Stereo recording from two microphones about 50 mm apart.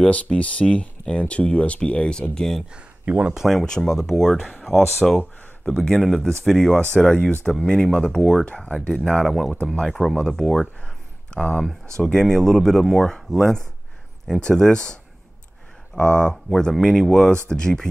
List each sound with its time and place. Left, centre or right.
0.0 s speech: left
2.7 s speech: right
3.4 s speech: centre
7.1 s speech: centre
9.3 s speech: centre
9.6 s speech: centre
10.1 s speech: centre